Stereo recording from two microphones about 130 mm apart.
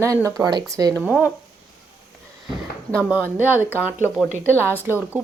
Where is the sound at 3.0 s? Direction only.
10° right (ahead or behind).